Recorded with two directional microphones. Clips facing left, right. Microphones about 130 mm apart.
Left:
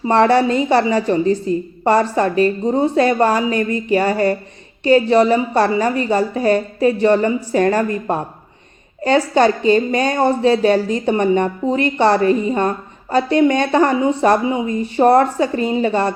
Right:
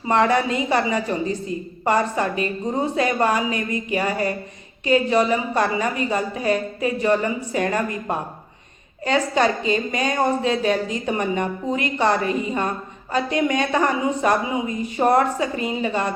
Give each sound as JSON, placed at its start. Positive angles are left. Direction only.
{"t": 0.1, "sound": "a woman's voice", "side_deg": 35}